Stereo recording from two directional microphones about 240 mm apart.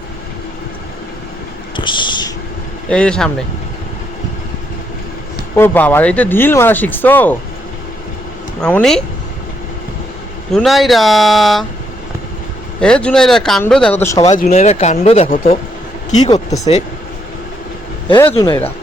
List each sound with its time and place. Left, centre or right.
1.7 s a sound: centre
2.9 s speech: centre
5.5 s speech: centre
8.6 s speech: centre
10.5 s speech: centre
12.8 s speech: centre
14.3 s speech: left
18.1 s speech: centre